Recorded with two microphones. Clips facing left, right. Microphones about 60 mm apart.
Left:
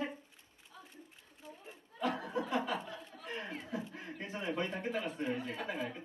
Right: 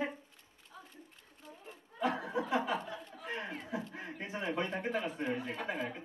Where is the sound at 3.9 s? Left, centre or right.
Centre.